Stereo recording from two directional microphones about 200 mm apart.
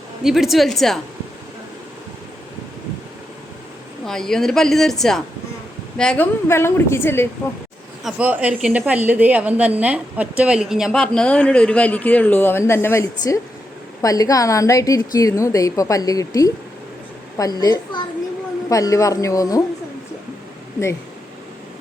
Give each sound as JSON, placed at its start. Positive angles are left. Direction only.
{"t": 0.2, "sound": "a woman's voice", "side_deg": 0}
{"t": 4.0, "sound": "a woman's voice", "side_deg": 0}
{"t": 8.0, "sound": "a woman's voice", "side_deg": -5}